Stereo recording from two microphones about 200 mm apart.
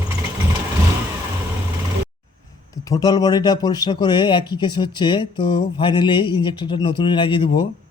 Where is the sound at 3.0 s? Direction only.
20° left (ahead or behind).